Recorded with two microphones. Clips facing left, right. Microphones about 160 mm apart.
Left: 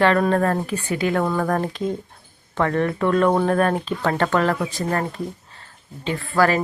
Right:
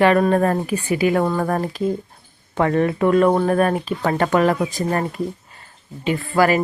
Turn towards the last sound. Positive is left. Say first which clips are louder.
# right 2 dB
turn(degrees=-10)  # may be behind; listen again after turning